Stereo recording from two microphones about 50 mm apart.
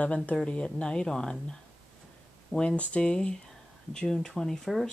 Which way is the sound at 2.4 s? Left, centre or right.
Centre.